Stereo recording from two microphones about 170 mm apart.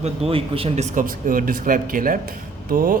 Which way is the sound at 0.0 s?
35° right (ahead or behind).